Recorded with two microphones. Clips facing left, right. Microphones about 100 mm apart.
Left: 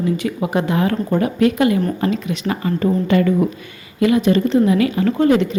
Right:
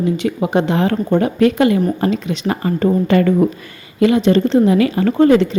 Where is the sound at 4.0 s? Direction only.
30° right (ahead or behind).